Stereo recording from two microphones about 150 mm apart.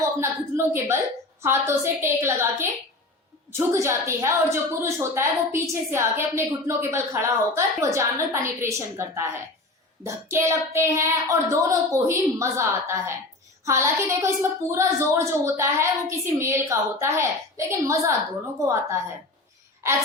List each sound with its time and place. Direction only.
0.0 s a woman's voice: 20° right (ahead or behind)
3.7 s a woman's voice: 20° right (ahead or behind)